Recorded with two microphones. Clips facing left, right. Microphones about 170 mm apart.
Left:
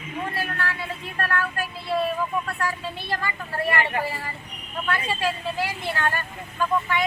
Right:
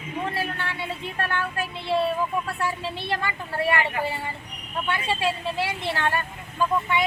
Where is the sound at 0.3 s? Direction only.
25° right (ahead or behind).